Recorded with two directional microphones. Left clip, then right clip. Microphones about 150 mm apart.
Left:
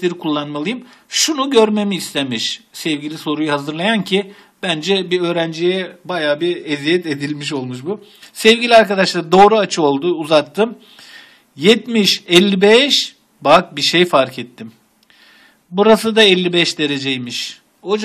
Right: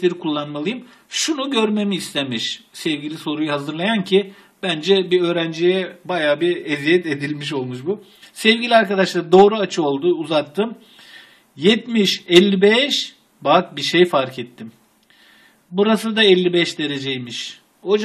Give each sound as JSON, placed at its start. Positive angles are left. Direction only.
{"t": 0.0, "sound": "speech", "side_deg": 35}
{"t": 15.7, "sound": "speech", "side_deg": 35}